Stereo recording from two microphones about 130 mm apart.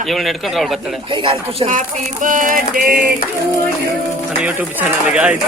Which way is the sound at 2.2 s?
90° right.